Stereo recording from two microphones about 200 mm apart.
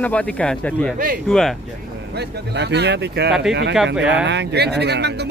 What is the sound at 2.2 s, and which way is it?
Speech, 55° right (ahead or behind).